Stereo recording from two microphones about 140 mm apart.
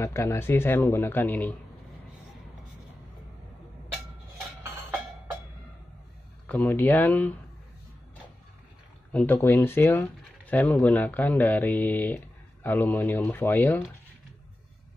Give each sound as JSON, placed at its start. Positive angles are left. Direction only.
{"t": 0.0, "sound": "speech", "side_deg": 20}
{"t": 6.4, "sound": "speech", "side_deg": 10}
{"t": 9.1, "sound": "speech", "side_deg": 15}